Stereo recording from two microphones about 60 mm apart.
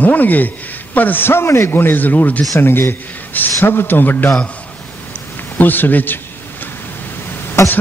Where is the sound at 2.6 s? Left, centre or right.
Left.